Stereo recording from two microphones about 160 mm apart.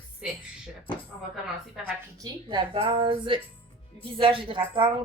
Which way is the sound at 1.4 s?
5° right (ahead or behind).